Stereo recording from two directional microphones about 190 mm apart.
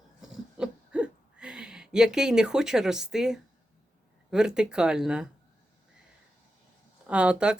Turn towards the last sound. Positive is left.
turn(degrees=-5)  # may be behind; listen again after turning